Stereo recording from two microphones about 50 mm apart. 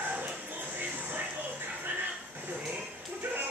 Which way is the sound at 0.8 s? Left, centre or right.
Right.